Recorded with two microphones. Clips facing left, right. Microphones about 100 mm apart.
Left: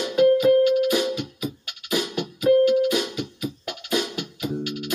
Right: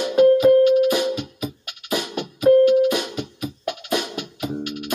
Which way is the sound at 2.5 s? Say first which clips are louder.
Right 4 dB; 55° right (ahead or behind).